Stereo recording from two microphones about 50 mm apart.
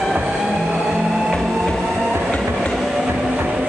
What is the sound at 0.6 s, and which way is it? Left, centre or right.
Vehicle, centre.